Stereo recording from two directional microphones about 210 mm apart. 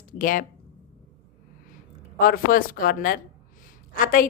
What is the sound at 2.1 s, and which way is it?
A woman's voice, 40° left (ahead or behind).